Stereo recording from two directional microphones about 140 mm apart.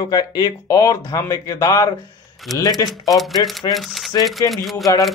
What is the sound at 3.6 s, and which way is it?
Speech, centre (ahead or behind).